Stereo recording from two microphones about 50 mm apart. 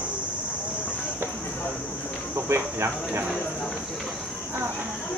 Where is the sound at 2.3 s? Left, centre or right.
Right.